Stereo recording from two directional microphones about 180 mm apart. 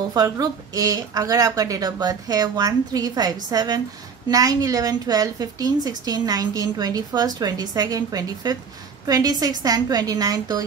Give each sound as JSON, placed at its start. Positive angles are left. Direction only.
{"t": 0.1, "sound": "a woman's voice", "side_deg": -20}